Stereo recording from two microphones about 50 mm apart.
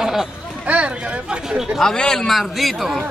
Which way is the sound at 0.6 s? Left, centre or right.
Right.